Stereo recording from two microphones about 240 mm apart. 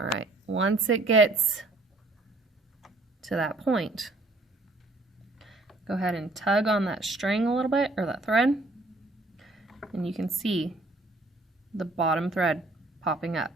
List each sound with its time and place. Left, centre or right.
0.2 s a sound: right
2.8 s speech: centre
5.4 s speech: centre
11.8 s speech: centre